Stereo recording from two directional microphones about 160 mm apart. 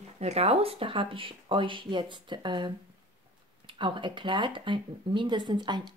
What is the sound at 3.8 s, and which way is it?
Speech, 30° right (ahead or behind).